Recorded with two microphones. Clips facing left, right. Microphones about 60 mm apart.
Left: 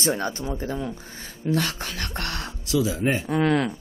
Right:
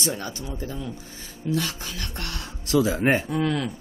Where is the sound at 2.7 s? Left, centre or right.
Right.